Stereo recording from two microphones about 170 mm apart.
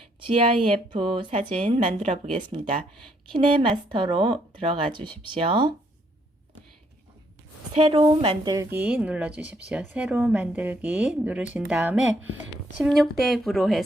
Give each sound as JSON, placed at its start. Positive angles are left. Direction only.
{"t": 0.2, "sound": "speech", "side_deg": -30}
{"t": 1.3, "sound": "speech", "side_deg": -40}
{"t": 3.3, "sound": "speech", "side_deg": -30}
{"t": 7.7, "sound": "speech", "side_deg": -30}
{"t": 8.5, "sound": "a woman's voice", "side_deg": -10}